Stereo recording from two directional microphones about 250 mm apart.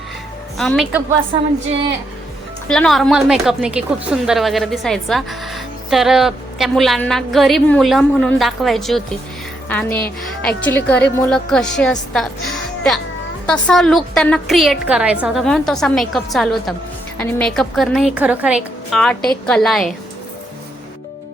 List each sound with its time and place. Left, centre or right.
0.5 s a woman's voice: centre
2.6 s a woman's voice: centre